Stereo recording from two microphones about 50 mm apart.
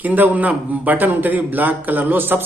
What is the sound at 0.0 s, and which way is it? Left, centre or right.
A man's voice, right.